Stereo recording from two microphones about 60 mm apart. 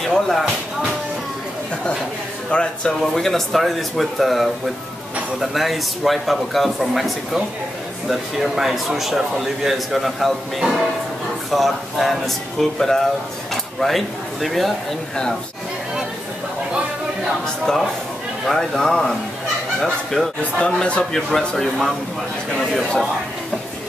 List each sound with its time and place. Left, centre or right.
0.0 s speech: centre
2.5 s speech: centre
3.0 s a man's voice: centre
18.4 s speech: centre
20.5 s speech: centre
21.3 s speech: centre